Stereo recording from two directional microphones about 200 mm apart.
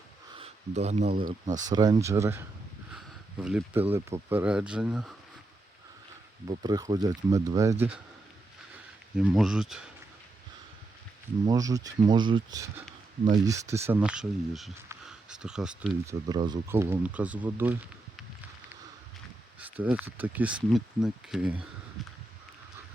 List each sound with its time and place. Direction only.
0.3 s a sound: 30° right (ahead or behind)
1.5 s speech: 40° right (ahead or behind)
1.7 s speech: 20° right (ahead or behind); by 5.1 s 5° right (ahead or behind)
6.5 s speech: 20° right (ahead or behind)
9.1 s speech: centre (ahead or behind)
11.4 s speech: 20° right (ahead or behind)
16.0 s speech: 20° right (ahead or behind)
19.8 s speech: 10° right (ahead or behind)